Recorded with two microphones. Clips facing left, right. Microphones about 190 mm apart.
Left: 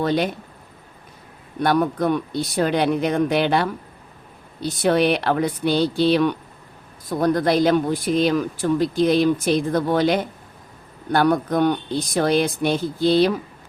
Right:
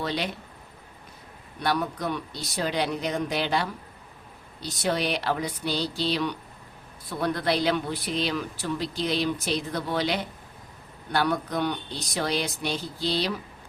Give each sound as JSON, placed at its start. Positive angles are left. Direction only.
{"t": 0.0, "sound": "speech", "side_deg": 50}
{"t": 1.5, "sound": "speech", "side_deg": 50}
{"t": 7.1, "sound": "speech", "side_deg": 45}